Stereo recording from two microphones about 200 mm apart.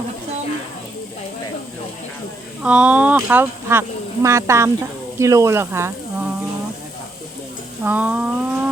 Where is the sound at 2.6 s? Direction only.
5° right (ahead or behind).